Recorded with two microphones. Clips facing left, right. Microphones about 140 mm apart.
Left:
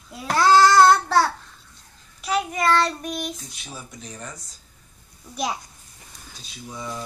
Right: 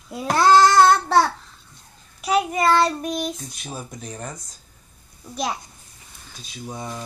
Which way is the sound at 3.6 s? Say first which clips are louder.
Right 6 dB; 45° right (ahead or behind).